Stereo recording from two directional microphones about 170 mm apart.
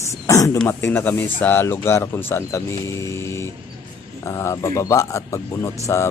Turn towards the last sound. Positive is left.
turn(degrees=15)  # may be behind; listen again after turning